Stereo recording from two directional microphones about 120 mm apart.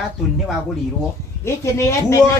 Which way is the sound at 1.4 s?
25° left (ahead or behind).